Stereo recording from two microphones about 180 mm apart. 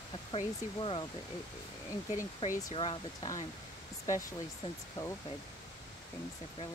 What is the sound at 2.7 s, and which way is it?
Speech, 25° left (ahead or behind).